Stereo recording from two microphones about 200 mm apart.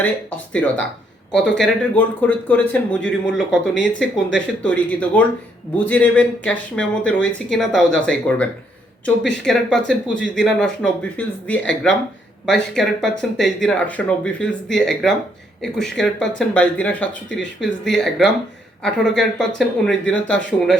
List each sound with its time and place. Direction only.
0.0 s speech: 10° left (ahead or behind)
9.8 s speech: 65° left (ahead or behind)
10.4 s speech: 5° left (ahead or behind)